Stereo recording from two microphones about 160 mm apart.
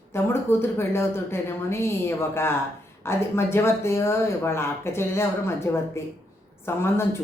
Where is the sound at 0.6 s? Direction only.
15° left (ahead or behind).